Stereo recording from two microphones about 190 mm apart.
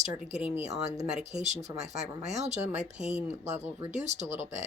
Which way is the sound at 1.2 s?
35° right (ahead or behind).